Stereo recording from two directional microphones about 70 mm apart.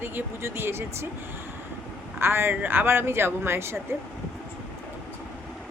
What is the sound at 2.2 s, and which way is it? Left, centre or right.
A woman's voice, right.